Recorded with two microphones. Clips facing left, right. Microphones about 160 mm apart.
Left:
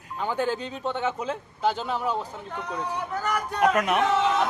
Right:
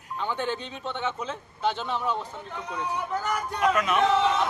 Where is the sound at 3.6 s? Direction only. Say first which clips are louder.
Left 2 dB; 60° left (ahead or behind).